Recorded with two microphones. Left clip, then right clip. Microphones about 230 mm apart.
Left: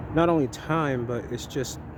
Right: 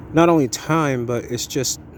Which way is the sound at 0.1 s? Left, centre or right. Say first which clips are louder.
Right 7 dB; right.